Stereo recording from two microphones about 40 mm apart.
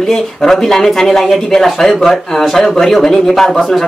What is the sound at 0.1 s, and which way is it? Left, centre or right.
Speech, centre.